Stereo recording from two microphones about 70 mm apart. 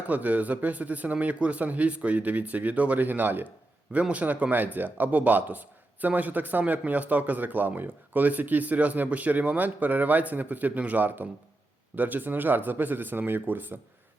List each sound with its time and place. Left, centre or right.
0.1 s speech: right